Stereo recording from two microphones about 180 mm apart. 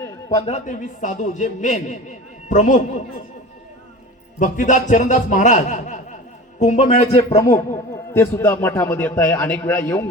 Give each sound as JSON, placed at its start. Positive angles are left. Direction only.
{"t": 0.0, "sound": "a sound", "side_deg": 15}
{"t": 0.4, "sound": "a man's voice", "side_deg": 40}
{"t": 4.4, "sound": "a man's voice", "side_deg": 45}
{"t": 8.1, "sound": "a man's voice", "side_deg": 15}